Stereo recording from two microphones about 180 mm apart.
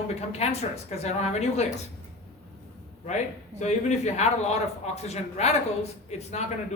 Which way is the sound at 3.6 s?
40° left (ahead or behind).